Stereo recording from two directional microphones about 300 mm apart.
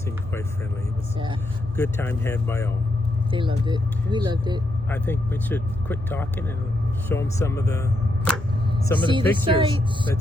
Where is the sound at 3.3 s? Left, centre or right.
Centre.